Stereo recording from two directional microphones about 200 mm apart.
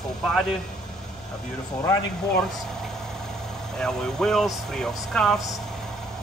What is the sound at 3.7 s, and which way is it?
A man's voice, 5° left (ahead or behind).